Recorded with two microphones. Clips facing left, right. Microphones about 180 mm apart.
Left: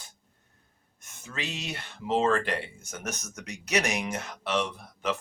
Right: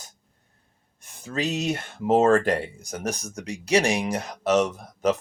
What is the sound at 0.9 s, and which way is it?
Speech, 35° right (ahead or behind).